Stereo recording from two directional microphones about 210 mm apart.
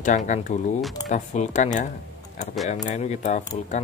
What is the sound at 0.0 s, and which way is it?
Speech, 35° left (ahead or behind).